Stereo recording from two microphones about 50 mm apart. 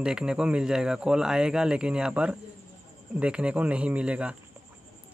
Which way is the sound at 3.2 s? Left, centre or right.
Right.